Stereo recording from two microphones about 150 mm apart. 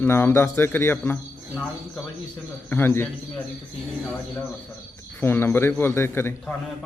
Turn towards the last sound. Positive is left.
turn(degrees=15)  # may be behind; listen again after turning